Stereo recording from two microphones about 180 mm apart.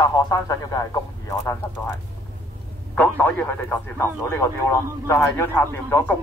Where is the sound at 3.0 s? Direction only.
10° left (ahead or behind).